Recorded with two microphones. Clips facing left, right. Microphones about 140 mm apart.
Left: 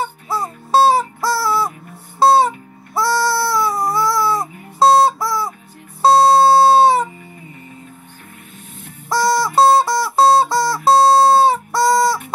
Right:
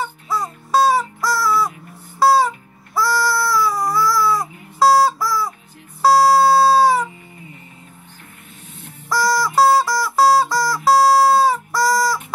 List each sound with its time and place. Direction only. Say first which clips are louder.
0.0 s music: left 1 dB; 25° left (ahead or behind)
9.1 s music: left 2 dB; 25° left (ahead or behind)